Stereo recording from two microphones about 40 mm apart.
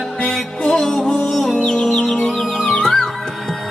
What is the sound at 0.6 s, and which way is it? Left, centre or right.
Music, centre.